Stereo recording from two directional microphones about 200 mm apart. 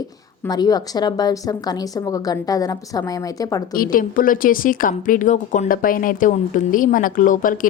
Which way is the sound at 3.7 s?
45° left (ahead or behind).